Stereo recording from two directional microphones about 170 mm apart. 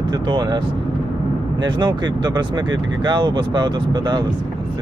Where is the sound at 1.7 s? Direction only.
25° right (ahead or behind).